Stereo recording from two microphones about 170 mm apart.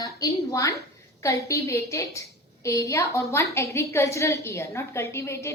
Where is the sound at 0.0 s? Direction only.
20° left (ahead or behind).